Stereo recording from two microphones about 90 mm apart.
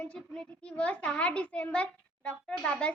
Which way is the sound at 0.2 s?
10° left (ahead or behind).